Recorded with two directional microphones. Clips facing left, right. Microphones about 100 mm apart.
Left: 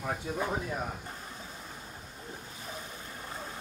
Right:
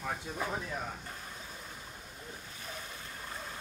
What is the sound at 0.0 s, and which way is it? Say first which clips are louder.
Speech: left 4 dB; 30° left (ahead or behind).